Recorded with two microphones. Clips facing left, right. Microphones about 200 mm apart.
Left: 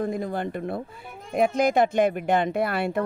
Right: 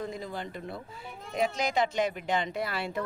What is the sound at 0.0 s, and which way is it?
Speech, 55° left (ahead or behind).